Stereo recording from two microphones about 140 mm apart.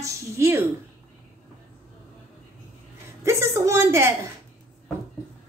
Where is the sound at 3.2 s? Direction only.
20° right (ahead or behind).